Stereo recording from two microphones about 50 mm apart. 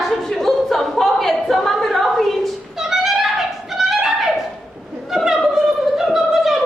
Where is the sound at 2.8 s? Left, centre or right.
Centre.